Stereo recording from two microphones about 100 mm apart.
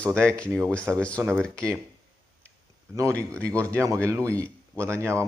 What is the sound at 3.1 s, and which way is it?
Speech, 15° left (ahead or behind).